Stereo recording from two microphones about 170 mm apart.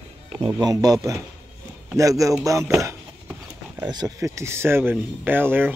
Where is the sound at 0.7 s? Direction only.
20° right (ahead or behind).